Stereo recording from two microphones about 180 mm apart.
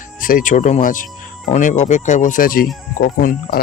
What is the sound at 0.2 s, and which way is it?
Speech, 50° left (ahead or behind).